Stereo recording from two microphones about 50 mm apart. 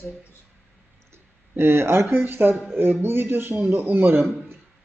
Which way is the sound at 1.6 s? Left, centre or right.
Right.